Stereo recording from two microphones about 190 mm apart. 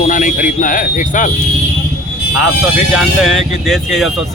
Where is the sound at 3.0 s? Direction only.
Centre (ahead or behind).